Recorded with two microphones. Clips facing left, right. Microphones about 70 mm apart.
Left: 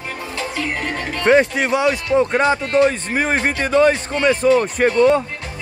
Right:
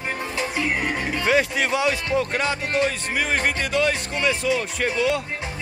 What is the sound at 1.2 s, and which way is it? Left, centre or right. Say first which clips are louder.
A man's voice: left 7 dB; left.